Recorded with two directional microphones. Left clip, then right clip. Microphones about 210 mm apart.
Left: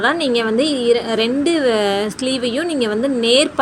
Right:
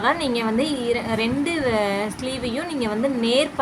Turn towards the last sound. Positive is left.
turn(degrees=20)  # may be behind; listen again after turning